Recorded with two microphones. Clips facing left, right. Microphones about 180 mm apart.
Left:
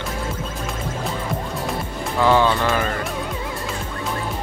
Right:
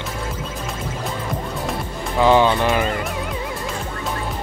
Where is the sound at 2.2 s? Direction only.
20° right (ahead or behind).